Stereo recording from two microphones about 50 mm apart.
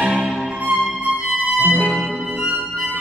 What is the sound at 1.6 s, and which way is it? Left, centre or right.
Music, right.